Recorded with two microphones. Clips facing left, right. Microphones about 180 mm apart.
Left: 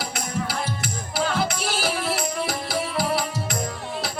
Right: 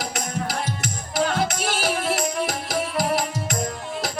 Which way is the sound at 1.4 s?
45° right (ahead or behind).